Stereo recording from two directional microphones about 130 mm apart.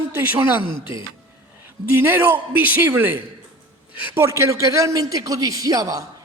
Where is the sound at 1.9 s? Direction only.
15° right (ahead or behind).